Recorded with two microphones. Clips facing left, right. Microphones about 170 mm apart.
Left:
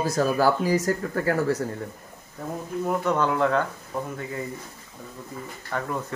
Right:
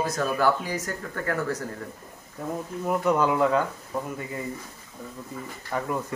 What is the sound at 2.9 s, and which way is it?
Speech, 10° right (ahead or behind).